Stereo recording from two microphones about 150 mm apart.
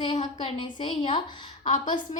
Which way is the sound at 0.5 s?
30° left (ahead or behind).